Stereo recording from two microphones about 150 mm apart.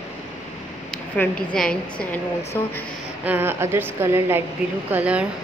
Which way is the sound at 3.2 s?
10° right (ahead or behind).